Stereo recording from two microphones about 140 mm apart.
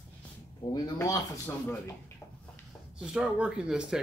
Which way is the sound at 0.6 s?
35° left (ahead or behind).